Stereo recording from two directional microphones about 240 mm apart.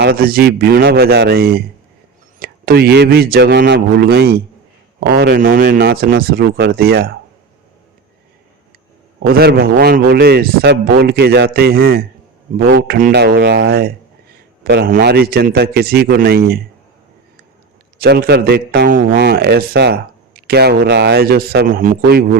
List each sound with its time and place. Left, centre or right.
0.0 s a man's voice: right
9.2 s a man's voice: right
18.0 s a man's voice: right